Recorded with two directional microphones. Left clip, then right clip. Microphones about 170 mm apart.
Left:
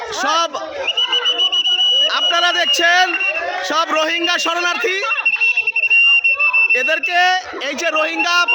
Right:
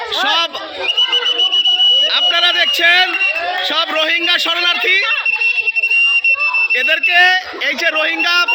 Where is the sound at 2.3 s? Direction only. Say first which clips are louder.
Right 2 dB; 40° left (ahead or behind).